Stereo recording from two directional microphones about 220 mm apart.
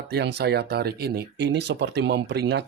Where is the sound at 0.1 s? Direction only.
50° right (ahead or behind).